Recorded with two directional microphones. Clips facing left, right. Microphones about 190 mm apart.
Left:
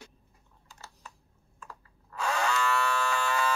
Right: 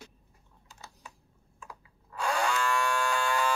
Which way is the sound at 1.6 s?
10° right (ahead or behind).